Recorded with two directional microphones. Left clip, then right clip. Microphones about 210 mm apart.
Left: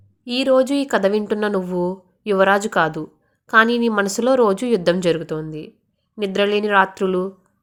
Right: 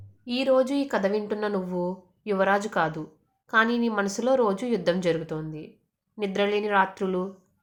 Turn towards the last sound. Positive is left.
turn(degrees=30)  # may be behind; listen again after turning